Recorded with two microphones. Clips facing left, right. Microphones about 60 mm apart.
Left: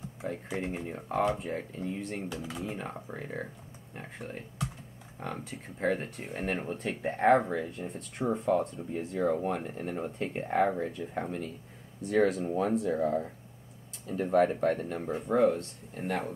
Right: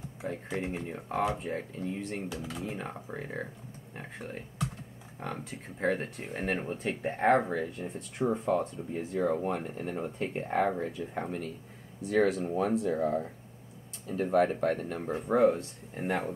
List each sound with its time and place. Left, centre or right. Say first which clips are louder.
0.2 s speech: even; centre
15.0 s speech: right 1 dB; centre